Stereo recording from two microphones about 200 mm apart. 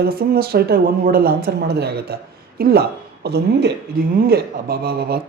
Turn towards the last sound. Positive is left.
turn(degrees=-50)  # may be behind; listen again after turning